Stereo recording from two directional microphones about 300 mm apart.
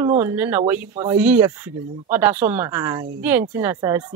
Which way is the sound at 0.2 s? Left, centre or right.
Centre.